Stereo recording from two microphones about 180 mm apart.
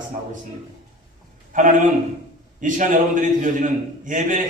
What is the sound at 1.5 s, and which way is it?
A man's voice, 45° right (ahead or behind).